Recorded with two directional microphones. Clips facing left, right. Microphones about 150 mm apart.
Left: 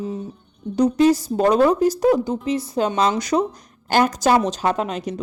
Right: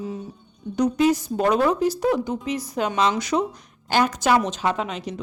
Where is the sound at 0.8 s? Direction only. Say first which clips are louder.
Left 4 dB; 35° left (ahead or behind).